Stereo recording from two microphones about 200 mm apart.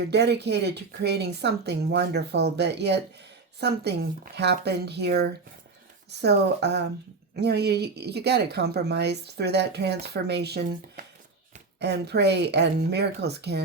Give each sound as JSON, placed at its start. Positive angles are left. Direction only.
{"t": 0.0, "sound": "a woman's voice", "side_deg": -55}